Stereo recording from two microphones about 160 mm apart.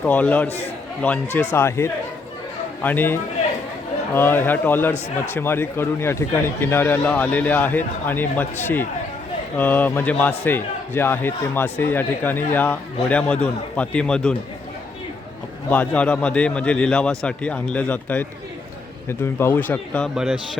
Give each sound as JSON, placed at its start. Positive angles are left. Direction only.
{"t": 0.0, "sound": "a man's voice", "side_deg": 10}
{"t": 15.7, "sound": "a man's voice", "side_deg": 10}
{"t": 20.1, "sound": "a man's voice", "side_deg": -5}